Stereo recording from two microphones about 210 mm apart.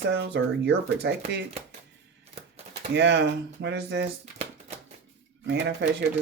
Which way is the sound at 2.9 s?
55° right (ahead or behind).